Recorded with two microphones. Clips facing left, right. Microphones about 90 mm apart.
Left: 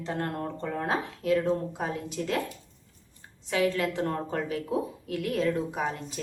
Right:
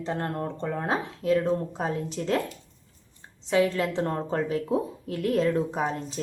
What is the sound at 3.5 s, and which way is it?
A woman's voice, 25° right (ahead or behind).